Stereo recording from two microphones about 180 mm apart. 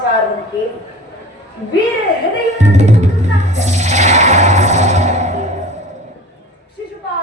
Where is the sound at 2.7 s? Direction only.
40° right (ahead or behind).